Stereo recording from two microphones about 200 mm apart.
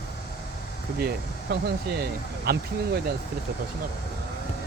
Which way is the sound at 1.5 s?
50° right (ahead or behind).